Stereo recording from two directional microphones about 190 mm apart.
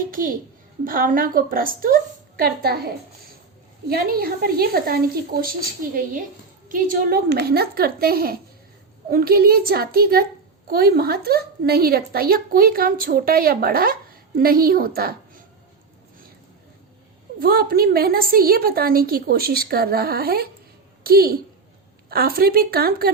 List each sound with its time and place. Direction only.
0.1 s a child's voice: 50° right (ahead or behind)
17.4 s a woman's voice: 50° right (ahead or behind)